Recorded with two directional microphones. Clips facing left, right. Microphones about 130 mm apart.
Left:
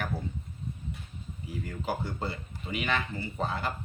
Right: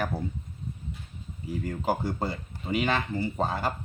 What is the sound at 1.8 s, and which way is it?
Speech, 40° right (ahead or behind).